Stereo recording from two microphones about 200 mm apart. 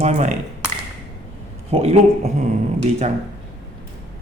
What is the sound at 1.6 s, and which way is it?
Speech, 30° right (ahead or behind).